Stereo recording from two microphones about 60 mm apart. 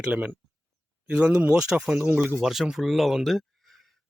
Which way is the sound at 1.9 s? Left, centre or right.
Right.